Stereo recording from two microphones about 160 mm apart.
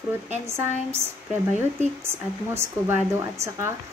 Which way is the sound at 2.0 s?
15° right (ahead or behind).